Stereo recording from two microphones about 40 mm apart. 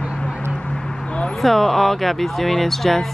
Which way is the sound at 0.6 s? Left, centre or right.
Centre.